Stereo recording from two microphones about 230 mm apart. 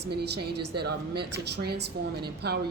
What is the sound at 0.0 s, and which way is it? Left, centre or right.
A woman's voice, right.